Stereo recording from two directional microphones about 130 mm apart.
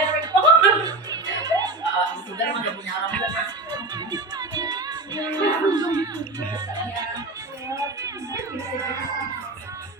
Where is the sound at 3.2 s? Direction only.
30° right (ahead or behind).